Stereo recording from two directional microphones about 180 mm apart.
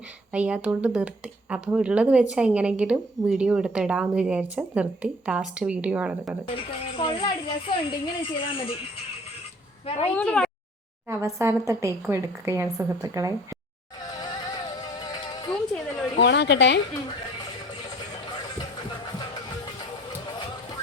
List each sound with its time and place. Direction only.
0.3 s speech: 5° right (ahead or behind)
6.5 s speech: 30° left (ahead or behind)
10.1 s speech: 10° left (ahead or behind)
11.1 s speech: 15° right (ahead or behind)
14.2 s music: 20° left (ahead or behind)
16.1 s a woman's voice: 75° left (ahead or behind)